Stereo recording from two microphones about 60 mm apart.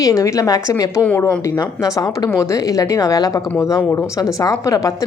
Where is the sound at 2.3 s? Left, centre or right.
Left.